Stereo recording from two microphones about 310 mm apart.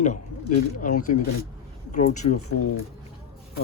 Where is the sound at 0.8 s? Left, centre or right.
Left.